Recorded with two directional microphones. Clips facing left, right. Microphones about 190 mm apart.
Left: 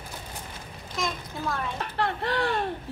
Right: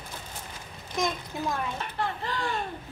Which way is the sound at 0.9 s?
20° right (ahead or behind).